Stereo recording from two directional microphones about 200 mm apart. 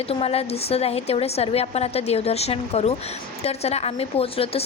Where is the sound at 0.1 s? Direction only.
30° left (ahead or behind).